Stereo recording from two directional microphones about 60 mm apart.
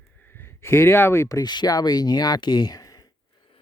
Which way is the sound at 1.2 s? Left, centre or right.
Left.